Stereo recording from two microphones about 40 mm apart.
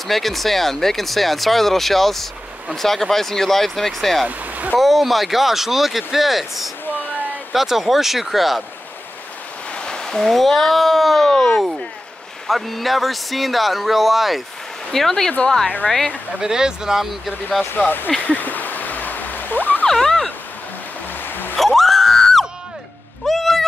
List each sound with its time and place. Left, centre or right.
0.0 s speech: centre
4.4 s speech: right
4.7 s speech: centre
9.8 s a sound: centre
10.2 s speech: centre
14.9 s speech: centre
16.3 s speech: centre
17.7 s speech: left
18.2 s a sound: left
19.9 s a sound: centre
21.2 s a sound: left
21.5 s screaming: centre
23.2 s cat: centre